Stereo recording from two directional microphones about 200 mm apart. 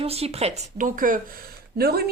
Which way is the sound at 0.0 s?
30° right (ahead or behind).